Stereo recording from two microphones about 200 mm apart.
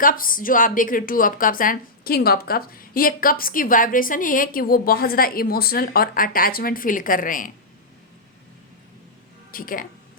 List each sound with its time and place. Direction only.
0.0 s a woman's voice: 45° left (ahead or behind)
9.5 s speech: 45° left (ahead or behind)